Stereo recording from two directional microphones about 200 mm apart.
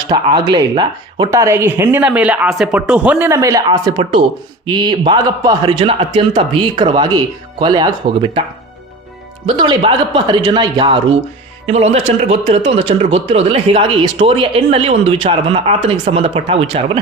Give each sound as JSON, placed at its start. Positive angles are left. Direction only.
{"t": 0.1, "sound": "speech", "side_deg": -20}
{"t": 9.5, "sound": "a man's voice", "side_deg": -25}